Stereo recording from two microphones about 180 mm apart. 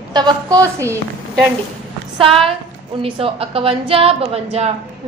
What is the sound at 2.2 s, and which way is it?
A woman's voice, 30° right (ahead or behind).